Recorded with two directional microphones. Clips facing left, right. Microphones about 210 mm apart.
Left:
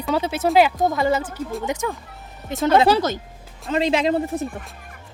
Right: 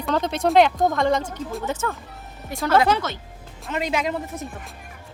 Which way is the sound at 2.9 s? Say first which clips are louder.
Left 4 dB; 40° left (ahead or behind).